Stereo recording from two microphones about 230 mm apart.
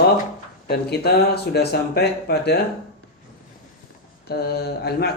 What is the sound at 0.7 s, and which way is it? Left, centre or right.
Speech, left.